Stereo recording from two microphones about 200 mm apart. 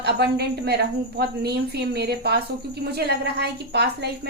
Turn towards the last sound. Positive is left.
turn(degrees=-55)  # may be behind; listen again after turning